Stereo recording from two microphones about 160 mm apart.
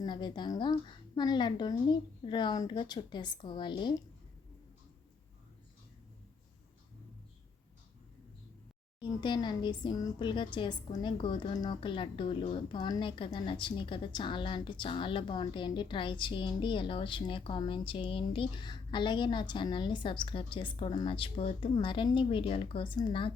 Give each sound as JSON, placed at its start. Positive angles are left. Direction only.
{"t": 0.0, "sound": "a woman's voice", "side_deg": 30}
{"t": 9.0, "sound": "a woman's voice", "side_deg": 30}